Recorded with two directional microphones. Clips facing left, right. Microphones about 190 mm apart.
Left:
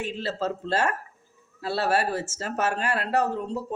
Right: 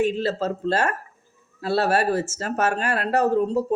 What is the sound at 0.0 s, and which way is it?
Speech, 45° right (ahead or behind).